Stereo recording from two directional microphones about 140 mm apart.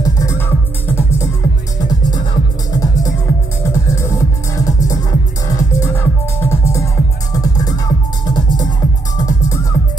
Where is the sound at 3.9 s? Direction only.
20° left (ahead or behind).